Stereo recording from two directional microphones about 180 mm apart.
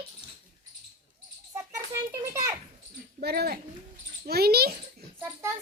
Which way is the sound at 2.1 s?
15° right (ahead or behind).